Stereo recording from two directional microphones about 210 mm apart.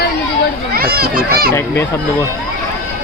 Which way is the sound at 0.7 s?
45° right (ahead or behind).